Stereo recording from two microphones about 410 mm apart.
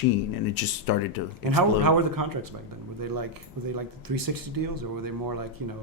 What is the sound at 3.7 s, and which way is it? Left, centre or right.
Speech, right.